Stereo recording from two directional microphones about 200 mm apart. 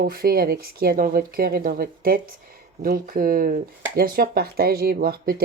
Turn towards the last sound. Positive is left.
turn(degrees=-50)  # may be behind; listen again after turning